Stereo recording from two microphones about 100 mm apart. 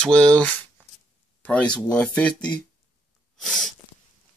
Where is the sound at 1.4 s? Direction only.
15° left (ahead or behind).